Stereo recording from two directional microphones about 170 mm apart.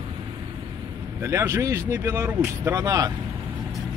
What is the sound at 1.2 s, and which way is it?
Speech, 15° right (ahead or behind).